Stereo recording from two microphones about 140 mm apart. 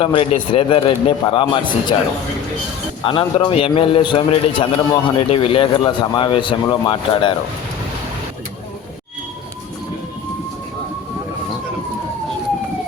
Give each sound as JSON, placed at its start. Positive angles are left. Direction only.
{"t": 0.0, "sound": "a man's voice", "side_deg": 40}
{"t": 3.0, "sound": "a man's voice", "side_deg": 40}